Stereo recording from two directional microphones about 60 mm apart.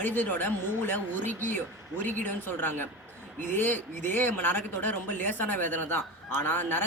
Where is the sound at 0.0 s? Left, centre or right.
Left.